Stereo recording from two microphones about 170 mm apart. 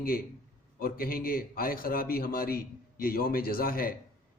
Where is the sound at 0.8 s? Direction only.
60° left (ahead or behind).